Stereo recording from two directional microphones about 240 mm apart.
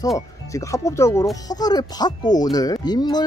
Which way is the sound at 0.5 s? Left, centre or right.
Centre.